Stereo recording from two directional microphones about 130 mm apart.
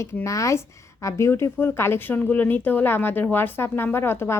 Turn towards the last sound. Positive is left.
turn(degrees=20)  # may be behind; listen again after turning